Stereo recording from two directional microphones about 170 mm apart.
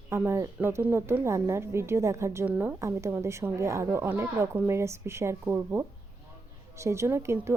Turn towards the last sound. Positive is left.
turn(degrees=-15)  # may be behind; listen again after turning